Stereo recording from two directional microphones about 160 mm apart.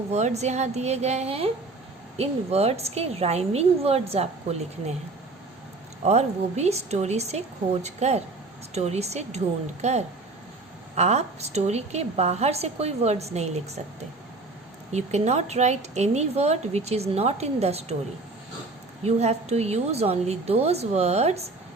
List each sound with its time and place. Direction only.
0.1 s speech: 45° right (ahead or behind)
6.1 s speech: 40° right (ahead or behind)
14.9 s speech: 45° right (ahead or behind)
19.0 s speech: 40° right (ahead or behind)